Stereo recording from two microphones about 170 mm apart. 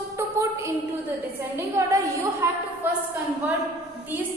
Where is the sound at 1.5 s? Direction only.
15° right (ahead or behind).